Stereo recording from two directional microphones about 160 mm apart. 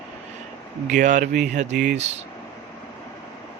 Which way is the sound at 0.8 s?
55° right (ahead or behind).